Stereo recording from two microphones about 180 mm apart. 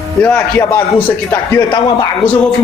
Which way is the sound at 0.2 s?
10° left (ahead or behind).